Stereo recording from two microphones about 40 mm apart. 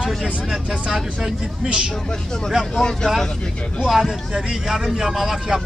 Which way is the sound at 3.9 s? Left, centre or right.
Centre.